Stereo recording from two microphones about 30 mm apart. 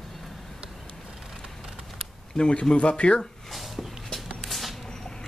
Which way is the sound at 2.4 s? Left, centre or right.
Left.